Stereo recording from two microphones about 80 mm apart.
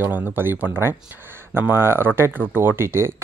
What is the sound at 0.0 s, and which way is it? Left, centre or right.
Speech, right.